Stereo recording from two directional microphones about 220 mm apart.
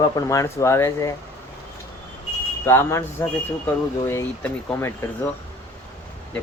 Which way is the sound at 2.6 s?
10° left (ahead or behind).